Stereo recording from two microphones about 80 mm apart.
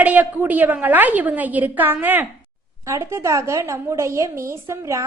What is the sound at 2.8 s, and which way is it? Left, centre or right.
A woman's voice, right.